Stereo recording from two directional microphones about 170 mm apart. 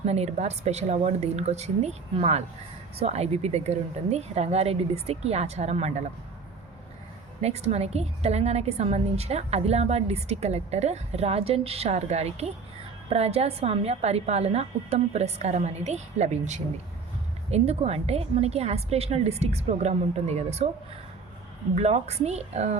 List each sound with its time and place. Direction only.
0.0 s a woman's voice: 40° right (ahead or behind)
7.4 s a woman's voice: 40° right (ahead or behind)
21.8 s a woman's voice: 40° right (ahead or behind)